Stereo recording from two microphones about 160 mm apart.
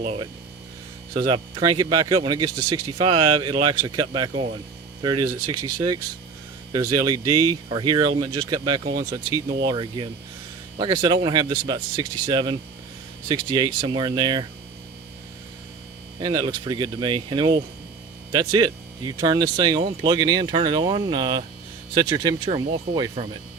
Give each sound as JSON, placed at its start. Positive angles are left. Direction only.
{"t": 1.2, "sound": "speech", "side_deg": -30}
{"t": 16.2, "sound": "speech", "side_deg": -30}